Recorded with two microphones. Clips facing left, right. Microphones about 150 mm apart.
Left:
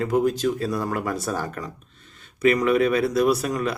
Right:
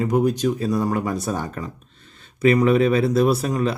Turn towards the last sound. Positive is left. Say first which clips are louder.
# right 2 dB
turn(degrees=-25)  # may be behind; listen again after turning